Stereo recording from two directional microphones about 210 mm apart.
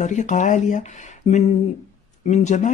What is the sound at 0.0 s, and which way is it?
Speech, 35° left (ahead or behind).